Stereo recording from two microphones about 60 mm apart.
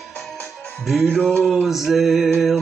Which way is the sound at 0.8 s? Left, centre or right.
Centre.